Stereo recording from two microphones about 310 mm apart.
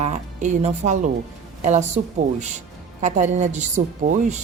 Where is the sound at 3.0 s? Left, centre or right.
Right.